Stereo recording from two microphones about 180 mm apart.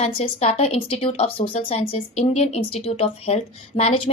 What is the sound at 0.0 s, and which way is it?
Speech, 35° left (ahead or behind).